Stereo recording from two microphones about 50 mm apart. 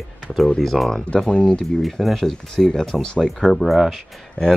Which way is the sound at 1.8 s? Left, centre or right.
Centre.